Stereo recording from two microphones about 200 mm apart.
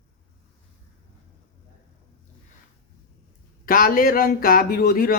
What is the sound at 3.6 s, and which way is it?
A man's voice, 45° left (ahead or behind).